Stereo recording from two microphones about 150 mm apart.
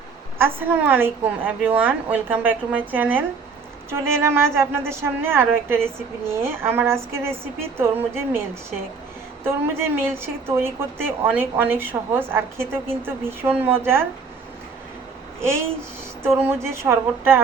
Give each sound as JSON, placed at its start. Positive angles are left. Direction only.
{"t": 0.3, "sound": "a woman's voice", "side_deg": -15}
{"t": 16.2, "sound": "a woman's voice", "side_deg": -15}